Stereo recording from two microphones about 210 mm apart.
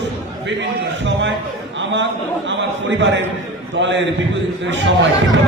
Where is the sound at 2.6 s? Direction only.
60° right (ahead or behind).